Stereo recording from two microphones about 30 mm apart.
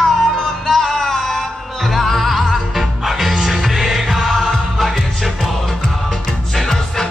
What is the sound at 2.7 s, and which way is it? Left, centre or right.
Music, centre.